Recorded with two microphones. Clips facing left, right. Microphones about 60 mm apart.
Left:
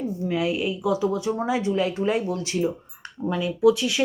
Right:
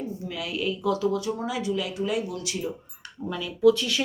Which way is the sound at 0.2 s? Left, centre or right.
Left.